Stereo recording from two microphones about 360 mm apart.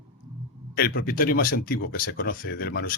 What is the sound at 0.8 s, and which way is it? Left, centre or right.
Speech, left.